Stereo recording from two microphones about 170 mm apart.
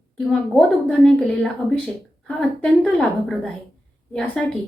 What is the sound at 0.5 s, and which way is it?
A woman's voice, centre (ahead or behind).